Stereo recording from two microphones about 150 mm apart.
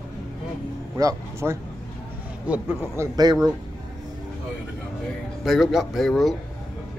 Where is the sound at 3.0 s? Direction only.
20° right (ahead or behind).